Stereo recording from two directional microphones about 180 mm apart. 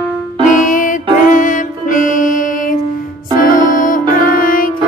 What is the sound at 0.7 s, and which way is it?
Music, 45° left (ahead or behind).